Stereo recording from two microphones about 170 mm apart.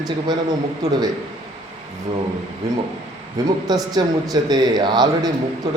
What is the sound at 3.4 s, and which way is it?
Speech, 25° right (ahead or behind).